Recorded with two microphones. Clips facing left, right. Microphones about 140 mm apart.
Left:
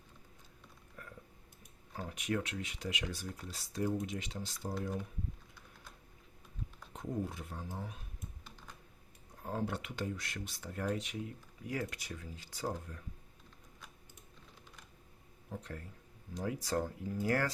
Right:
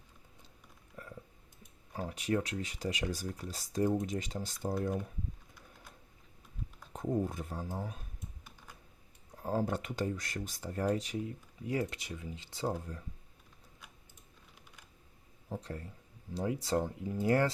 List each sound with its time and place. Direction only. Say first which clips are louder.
1.9 s speech: right 4 dB; 30° right (ahead or behind)
6.9 s speech: right 6 dB; 45° right (ahead or behind)
9.4 s speech: right 5 dB; 35° right (ahead or behind)
15.4 s speech: right 4 dB; 30° right (ahead or behind)